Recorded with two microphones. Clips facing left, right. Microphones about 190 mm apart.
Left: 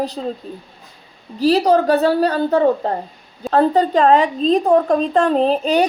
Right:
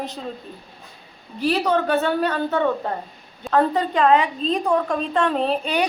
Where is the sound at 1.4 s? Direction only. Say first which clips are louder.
Left 6 dB; 35° left (ahead or behind).